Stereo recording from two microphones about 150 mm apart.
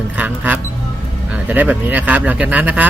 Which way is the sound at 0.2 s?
10° right (ahead or behind).